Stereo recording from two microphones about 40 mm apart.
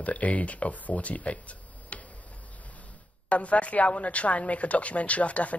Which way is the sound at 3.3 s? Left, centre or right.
Left.